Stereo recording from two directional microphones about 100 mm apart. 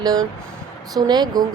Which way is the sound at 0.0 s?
40° right (ahead or behind).